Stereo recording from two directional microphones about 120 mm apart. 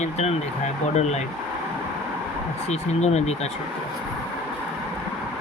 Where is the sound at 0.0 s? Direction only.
65° left (ahead or behind).